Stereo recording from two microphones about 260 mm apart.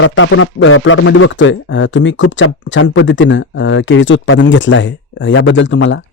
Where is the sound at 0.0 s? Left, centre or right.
Left.